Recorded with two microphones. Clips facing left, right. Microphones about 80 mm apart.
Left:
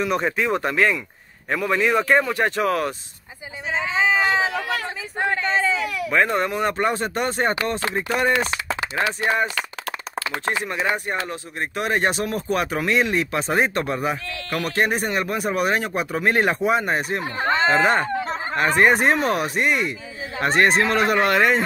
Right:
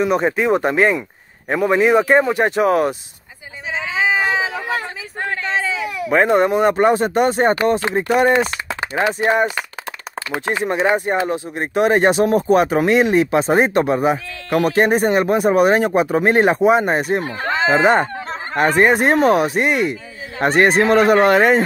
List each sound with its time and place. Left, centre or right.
0.0 s speech: centre
3.7 s a sound: centre
5.4 s baby cry: centre
5.9 s baby cry: right
6.2 s speech: right
17.5 s chicken: centre
17.8 s speech: centre
20.3 s speech: centre